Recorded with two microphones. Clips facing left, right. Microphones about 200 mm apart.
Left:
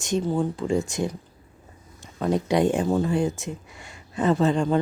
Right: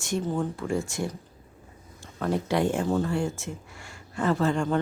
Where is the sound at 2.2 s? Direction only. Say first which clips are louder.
Left 4 dB; 20° left (ahead or behind).